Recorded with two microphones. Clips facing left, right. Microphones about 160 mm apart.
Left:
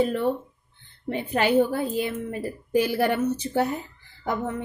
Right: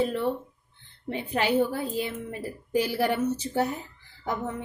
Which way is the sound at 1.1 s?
55° left (ahead or behind).